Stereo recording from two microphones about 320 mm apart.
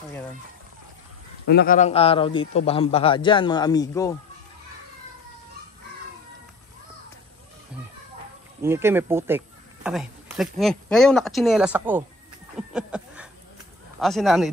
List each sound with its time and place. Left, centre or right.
1.5 s a man's voice: left; by 4.2 s centre
8.6 s speech: centre
12.5 s a sound: centre
13.9 s speech: centre